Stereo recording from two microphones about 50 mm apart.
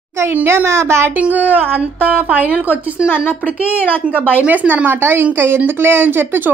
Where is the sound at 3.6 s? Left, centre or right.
Right.